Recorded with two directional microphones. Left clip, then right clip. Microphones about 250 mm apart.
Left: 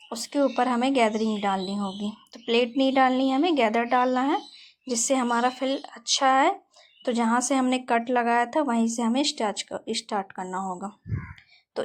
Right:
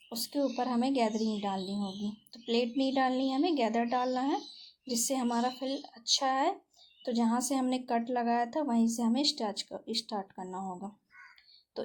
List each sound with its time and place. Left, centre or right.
0.1 s a woman's voice: centre
10.6 s speech: left